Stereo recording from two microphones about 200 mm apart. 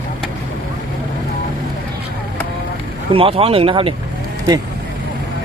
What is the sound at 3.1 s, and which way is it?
Speech, 30° right (ahead or behind).